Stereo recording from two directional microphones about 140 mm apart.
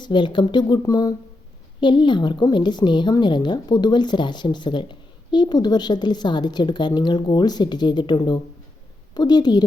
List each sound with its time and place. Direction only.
0.0 s a woman's voice: 35° left (ahead or behind)